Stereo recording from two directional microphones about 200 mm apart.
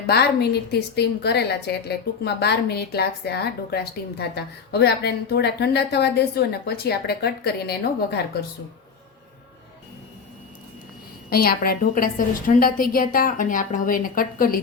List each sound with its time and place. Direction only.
0.7 s a woman's voice: 55° left (ahead or behind)
11.3 s a woman's voice: 50° left (ahead or behind)